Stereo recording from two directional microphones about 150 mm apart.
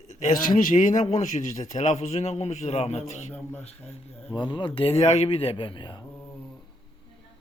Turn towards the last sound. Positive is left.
turn(degrees=30)  # may be behind; listen again after turning